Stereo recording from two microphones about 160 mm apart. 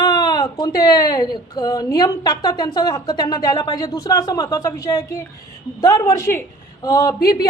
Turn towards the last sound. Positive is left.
turn(degrees=25)  # may be behind; listen again after turning